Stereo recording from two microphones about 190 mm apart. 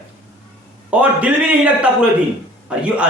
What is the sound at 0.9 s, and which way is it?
Speech, 10° right (ahead or behind).